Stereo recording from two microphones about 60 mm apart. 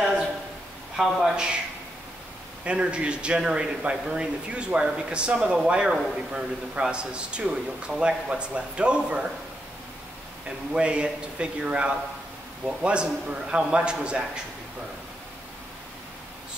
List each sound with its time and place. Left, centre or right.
1.0 s speech: centre
1.3 s a man's voice: centre
2.6 s a man's voice: centre
10.7 s a man's voice: centre